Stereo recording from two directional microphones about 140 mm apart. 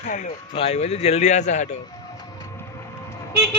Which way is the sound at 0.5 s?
45° left (ahead or behind).